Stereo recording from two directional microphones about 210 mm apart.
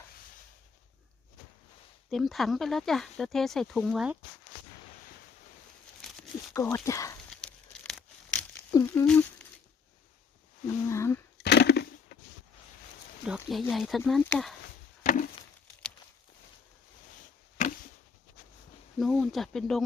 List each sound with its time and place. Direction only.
2.0 s speech: centre (ahead or behind)
6.0 s a sound: centre (ahead or behind)
6.5 s speech: 15° left (ahead or behind)
7.3 s crumpling: centre (ahead or behind)
8.7 s speech: 15° left (ahead or behind)
10.7 s speech: 15° left (ahead or behind)
11.3 s a sound: 50° left (ahead or behind)
13.2 s speech: centre (ahead or behind)
15.0 s wood: 40° left (ahead or behind)
18.9 s speech: centre (ahead or behind)